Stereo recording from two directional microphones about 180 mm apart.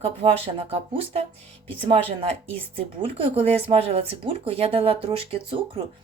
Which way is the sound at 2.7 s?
30° right (ahead or behind).